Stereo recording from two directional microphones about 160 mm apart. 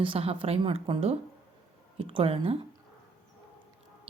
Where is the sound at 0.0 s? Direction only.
35° right (ahead or behind).